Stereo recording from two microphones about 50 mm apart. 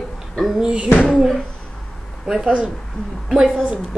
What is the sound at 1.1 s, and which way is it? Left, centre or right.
A woman's voice, centre.